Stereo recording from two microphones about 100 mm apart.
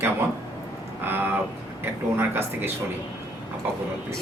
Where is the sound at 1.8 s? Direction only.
20° right (ahead or behind).